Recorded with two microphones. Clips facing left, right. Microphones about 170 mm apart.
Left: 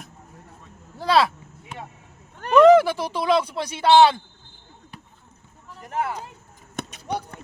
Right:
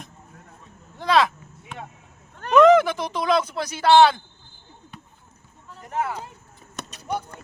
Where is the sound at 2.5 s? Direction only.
30° left (ahead or behind).